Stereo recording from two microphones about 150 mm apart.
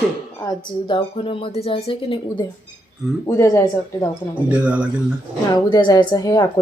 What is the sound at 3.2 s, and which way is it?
Speech, 20° left (ahead or behind).